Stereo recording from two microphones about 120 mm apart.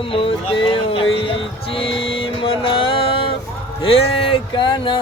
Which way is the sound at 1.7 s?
50° left (ahead or behind).